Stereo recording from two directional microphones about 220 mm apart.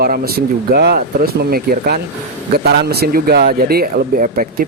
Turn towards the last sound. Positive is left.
turn(degrees=-40)  # may be behind; listen again after turning